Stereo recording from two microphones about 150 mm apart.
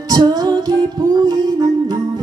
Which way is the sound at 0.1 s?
25° right (ahead or behind).